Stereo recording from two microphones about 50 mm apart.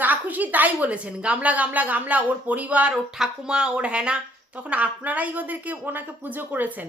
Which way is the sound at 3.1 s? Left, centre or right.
Centre.